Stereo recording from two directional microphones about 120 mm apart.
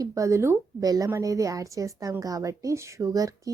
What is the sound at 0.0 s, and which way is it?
A woman's voice, 25° right (ahead or behind).